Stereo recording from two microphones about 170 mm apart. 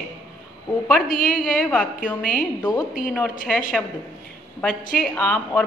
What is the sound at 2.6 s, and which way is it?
Speech, 25° left (ahead or behind).